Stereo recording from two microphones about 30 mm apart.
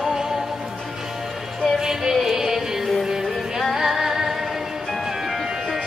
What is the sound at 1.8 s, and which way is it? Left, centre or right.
Music, centre.